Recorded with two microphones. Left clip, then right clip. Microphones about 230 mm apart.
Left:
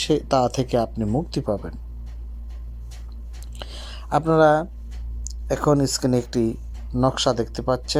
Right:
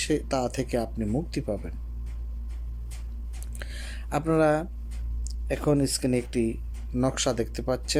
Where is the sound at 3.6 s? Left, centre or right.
Centre.